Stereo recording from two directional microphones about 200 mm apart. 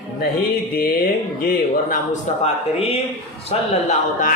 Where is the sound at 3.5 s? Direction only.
40° left (ahead or behind).